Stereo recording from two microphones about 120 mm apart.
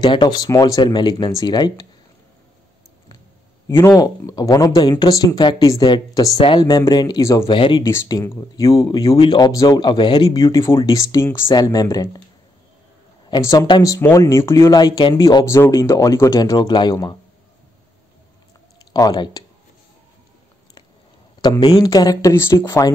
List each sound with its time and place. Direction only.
0.0 s speech: 40° left (ahead or behind)
3.6 s speech: 25° left (ahead or behind)
7.4 s speech: 45° left (ahead or behind)
8.2 s speech: 30° left (ahead or behind)
11.5 s speech: 30° left (ahead or behind)
13.4 s speech: 25° left (ahead or behind)
18.9 s speech: 35° left (ahead or behind)
21.4 s speech: 35° left (ahead or behind)